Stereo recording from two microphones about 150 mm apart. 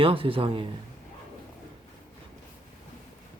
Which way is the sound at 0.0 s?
35° right (ahead or behind).